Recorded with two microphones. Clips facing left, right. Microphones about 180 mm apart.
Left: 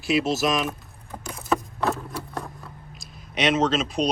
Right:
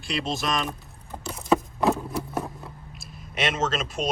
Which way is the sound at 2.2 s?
20° right (ahead or behind).